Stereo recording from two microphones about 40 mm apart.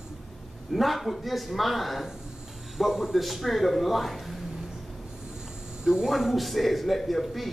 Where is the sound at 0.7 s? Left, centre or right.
Centre.